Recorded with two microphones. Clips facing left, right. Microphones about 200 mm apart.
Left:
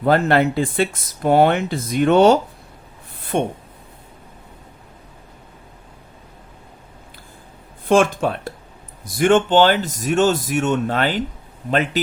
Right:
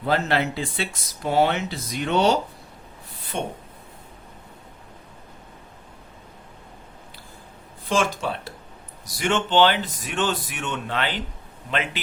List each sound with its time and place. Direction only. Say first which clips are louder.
0.0 s speech: left 7 dB; 50° left (ahead or behind)
7.9 s speech: left 8 dB; 55° left (ahead or behind)